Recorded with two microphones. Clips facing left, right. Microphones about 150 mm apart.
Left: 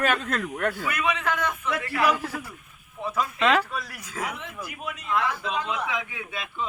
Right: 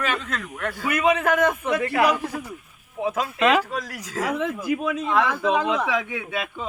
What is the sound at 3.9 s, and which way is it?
A man's voice, 90° right.